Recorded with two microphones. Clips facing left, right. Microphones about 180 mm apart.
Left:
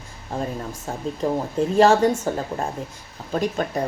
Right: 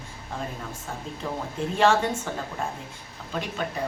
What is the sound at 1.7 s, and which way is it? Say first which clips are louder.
Speech: left 6 dB; 40° left (ahead or behind).